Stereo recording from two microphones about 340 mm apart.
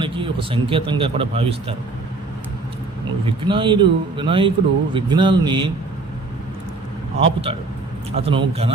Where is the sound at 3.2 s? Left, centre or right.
Centre.